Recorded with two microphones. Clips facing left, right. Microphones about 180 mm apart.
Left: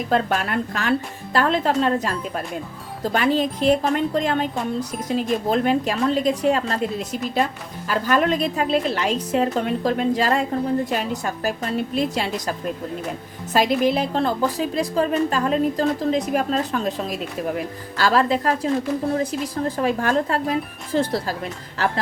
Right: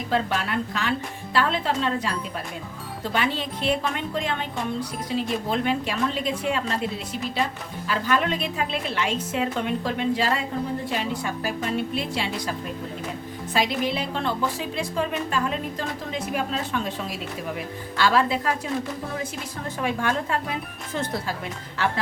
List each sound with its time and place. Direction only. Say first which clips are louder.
0.1 s a woman's voice: left 3 dB; 50° left (ahead or behind)
17.9 s speech: left 3 dB; 40° left (ahead or behind)